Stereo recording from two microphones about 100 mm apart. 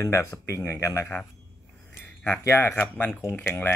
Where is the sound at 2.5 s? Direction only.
25° left (ahead or behind).